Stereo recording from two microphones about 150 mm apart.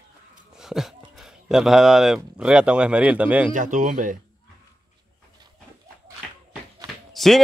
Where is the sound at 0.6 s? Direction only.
Centre (ahead or behind).